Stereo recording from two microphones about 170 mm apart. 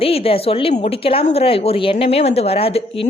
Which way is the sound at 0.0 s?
35° left (ahead or behind).